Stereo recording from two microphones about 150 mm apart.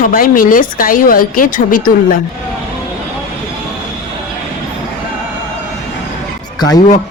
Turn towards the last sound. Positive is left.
turn(degrees=25)  # may be behind; listen again after turning